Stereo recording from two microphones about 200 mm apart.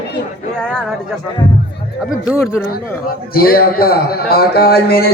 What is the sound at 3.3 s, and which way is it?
A man's voice, 45° left (ahead or behind).